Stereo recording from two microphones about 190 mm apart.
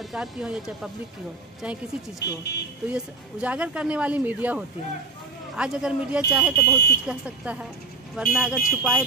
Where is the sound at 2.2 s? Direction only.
65° left (ahead or behind).